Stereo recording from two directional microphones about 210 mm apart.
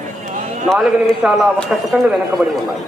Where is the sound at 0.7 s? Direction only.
Centre (ahead or behind).